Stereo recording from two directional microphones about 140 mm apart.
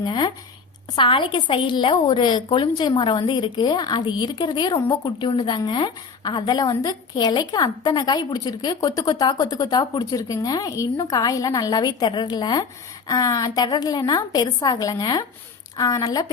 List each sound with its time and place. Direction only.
0.0 s a woman's voice: 30° left (ahead or behind)